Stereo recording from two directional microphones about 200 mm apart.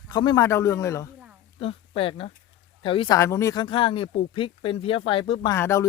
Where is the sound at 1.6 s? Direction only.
25° left (ahead or behind).